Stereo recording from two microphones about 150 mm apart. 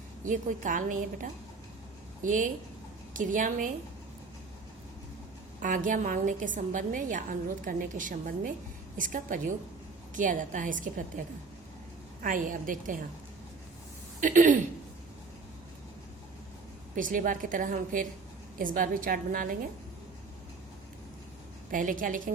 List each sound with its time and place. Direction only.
0.3 s a woman's voice: 60° right (ahead or behind)
5.5 s a woman's voice: 60° right (ahead or behind)
14.2 s a woman's voice: 60° right (ahead or behind)
16.9 s a woman's voice: 65° right (ahead or behind)
21.7 s a woman's voice: 60° right (ahead or behind)